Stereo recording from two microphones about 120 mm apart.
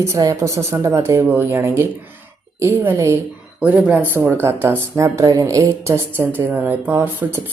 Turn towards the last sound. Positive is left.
turn(degrees=-20)  # may be behind; listen again after turning